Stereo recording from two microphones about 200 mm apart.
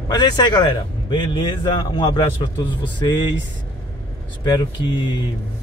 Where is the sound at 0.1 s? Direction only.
20° left (ahead or behind).